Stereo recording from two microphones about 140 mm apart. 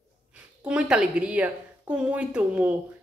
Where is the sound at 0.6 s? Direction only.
5° right (ahead or behind).